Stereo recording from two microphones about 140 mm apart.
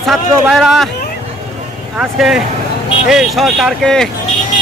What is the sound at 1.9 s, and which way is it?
Speech, 5° right (ahead or behind).